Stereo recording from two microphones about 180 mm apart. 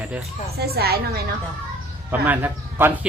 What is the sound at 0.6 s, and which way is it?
Speech, 60° right (ahead or behind).